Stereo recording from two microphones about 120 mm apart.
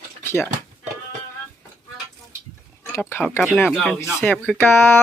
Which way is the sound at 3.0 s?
15° left (ahead or behind).